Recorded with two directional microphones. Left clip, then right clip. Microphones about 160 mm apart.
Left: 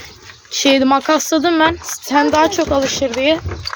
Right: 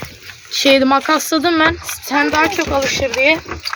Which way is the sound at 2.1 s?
40° left (ahead or behind).